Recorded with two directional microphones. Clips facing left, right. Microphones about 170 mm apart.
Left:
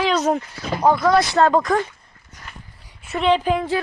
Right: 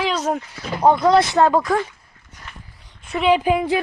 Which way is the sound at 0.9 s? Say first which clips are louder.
Right 1 dB; 20° right (ahead or behind).